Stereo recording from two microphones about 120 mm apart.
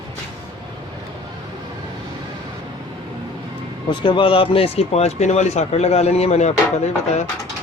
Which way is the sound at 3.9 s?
45° left (ahead or behind).